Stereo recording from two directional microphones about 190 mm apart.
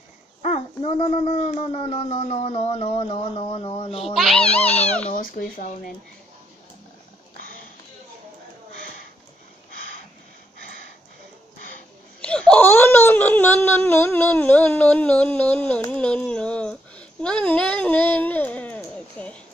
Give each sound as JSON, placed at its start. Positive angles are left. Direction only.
{"t": 0.4, "sound": "a sound", "side_deg": 35}
{"t": 4.0, "sound": "speech", "side_deg": 0}
{"t": 5.1, "sound": "speech", "side_deg": 45}
{"t": 12.2, "sound": "baby cry", "side_deg": 5}
{"t": 15.9, "sound": "speech", "side_deg": 5}